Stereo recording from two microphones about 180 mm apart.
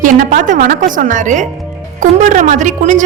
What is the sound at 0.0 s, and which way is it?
A woman's voice, 50° right (ahead or behind).